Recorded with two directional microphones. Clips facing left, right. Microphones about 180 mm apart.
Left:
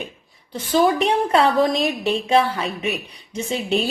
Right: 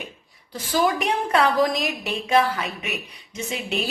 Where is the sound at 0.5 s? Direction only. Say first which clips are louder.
Left 4 dB; 25° left (ahead or behind).